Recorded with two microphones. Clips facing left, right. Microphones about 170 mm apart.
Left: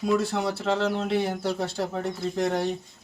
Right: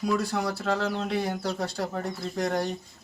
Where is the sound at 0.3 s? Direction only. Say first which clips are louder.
Left 2 dB; 25° left (ahead or behind).